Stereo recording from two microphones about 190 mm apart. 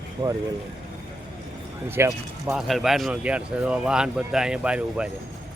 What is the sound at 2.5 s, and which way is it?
Speech, centre (ahead or behind).